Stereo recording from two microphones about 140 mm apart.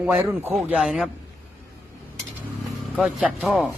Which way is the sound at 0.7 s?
Centre (ahead or behind).